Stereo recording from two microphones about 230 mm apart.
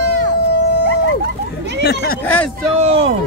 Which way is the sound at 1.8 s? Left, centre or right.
Left.